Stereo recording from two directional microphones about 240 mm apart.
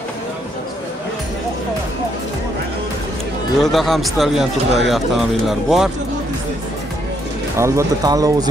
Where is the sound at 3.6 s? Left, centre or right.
Centre.